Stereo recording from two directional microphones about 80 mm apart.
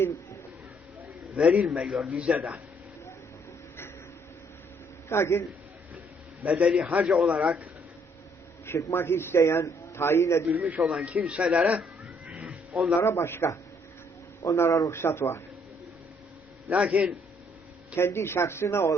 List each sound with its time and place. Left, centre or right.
1.4 s speech: centre
5.0 s a man's voice: left
6.4 s speech: centre
8.6 s a man's voice: left
10.5 s speech: centre
12.2 s cat: centre
13.0 s a man's voice: left
16.6 s speech: centre
17.9 s a man's voice: left